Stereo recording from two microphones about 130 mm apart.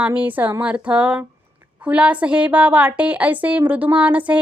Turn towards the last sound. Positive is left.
turn(degrees=-10)  # may be behind; listen again after turning